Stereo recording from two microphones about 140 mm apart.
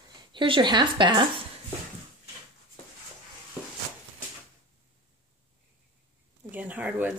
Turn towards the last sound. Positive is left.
turn(degrees=-10)  # may be behind; listen again after turning